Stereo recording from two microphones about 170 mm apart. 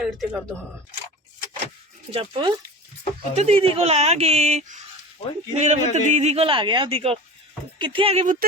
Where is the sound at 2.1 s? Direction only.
30° right (ahead or behind).